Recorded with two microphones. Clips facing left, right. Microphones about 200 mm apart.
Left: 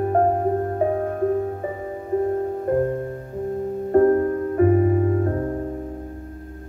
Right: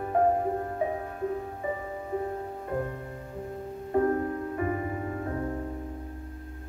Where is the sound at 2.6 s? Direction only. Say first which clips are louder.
Left 11 dB; 50° left (ahead or behind).